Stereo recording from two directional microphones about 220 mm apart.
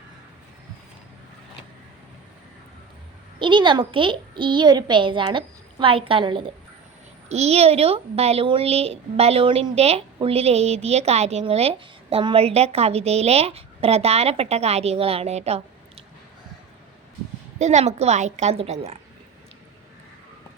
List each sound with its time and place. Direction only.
3.3 s speech: 20° right (ahead or behind)
17.6 s a woman's voice: 30° right (ahead or behind)